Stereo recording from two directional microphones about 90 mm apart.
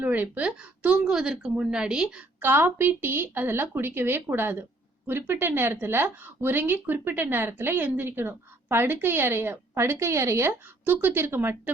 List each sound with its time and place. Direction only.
0.0 s a woman's voice: 20° right (ahead or behind)
2.4 s a woman's voice: 25° right (ahead or behind)